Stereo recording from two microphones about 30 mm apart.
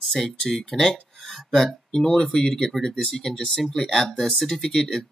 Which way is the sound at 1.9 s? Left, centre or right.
Left.